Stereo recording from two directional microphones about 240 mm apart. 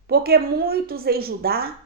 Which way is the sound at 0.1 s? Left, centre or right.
Right.